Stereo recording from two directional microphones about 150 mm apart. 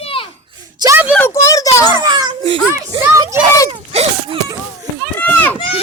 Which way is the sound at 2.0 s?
30° right (ahead or behind).